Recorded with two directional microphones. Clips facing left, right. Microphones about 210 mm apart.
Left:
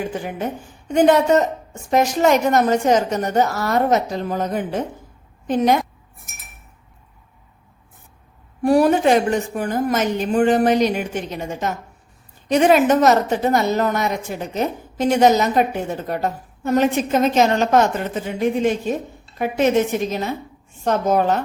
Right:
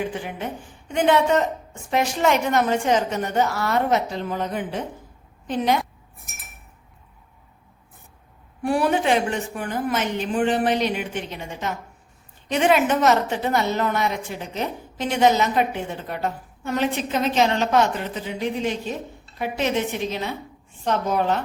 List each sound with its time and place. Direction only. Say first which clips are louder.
0.1 s a woman's voice: left 4 dB; 40° left (ahead or behind)
8.6 s a woman's voice: left 6 dB; 40° left (ahead or behind)